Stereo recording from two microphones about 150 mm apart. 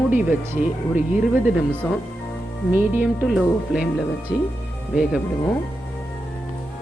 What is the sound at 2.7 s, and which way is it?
Speech, 10° right (ahead or behind).